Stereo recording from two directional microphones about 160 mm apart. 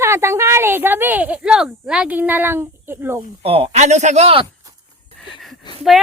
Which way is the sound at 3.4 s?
40° right (ahead or behind).